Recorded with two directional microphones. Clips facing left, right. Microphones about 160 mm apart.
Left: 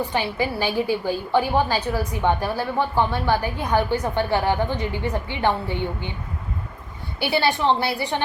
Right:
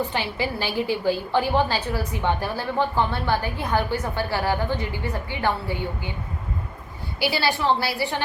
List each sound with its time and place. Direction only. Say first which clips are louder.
0.0 s a woman's voice: left 2 dB; 15° left (ahead or behind)
7.2 s a woman's voice: left 2 dB; 20° left (ahead or behind)